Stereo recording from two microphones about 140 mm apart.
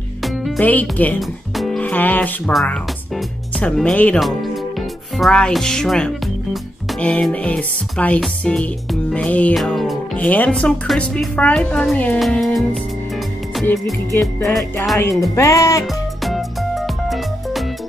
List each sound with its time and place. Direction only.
0.2 s music: centre (ahead or behind)
0.6 s speech: 10° left (ahead or behind)
1.6 s music: 5° left (ahead or behind)
2.5 s speech: 5° left (ahead or behind)
10.1 s speech: 10° left (ahead or behind)
14.2 s speech: centre (ahead or behind)
15.3 s speech: 25° left (ahead or behind)
15.8 s music: centre (ahead or behind)